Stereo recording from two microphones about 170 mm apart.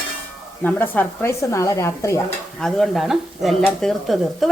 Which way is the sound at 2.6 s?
Centre (ahead or behind).